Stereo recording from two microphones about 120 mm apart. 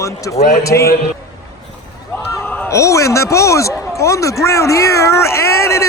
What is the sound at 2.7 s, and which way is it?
Speech, 25° left (ahead or behind).